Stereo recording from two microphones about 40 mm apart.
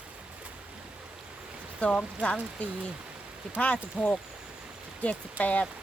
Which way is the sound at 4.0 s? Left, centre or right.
Right.